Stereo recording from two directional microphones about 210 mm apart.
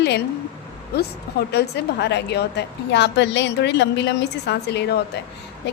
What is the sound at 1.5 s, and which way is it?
A woman's voice, 50° left (ahead or behind).